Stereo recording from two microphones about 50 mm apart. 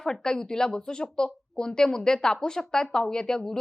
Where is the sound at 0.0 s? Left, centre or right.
Centre.